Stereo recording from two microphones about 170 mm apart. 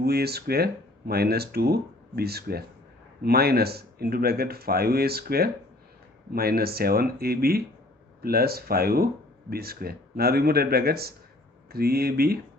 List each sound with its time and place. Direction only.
0.0 s speech: 70° right (ahead or behind)